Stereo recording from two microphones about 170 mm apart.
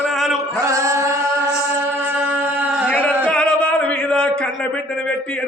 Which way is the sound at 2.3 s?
10° right (ahead or behind).